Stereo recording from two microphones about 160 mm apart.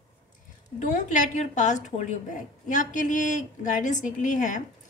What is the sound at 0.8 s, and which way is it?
A woman's voice, 50° left (ahead or behind).